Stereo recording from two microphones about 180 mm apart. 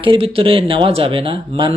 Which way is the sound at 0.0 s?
30° right (ahead or behind).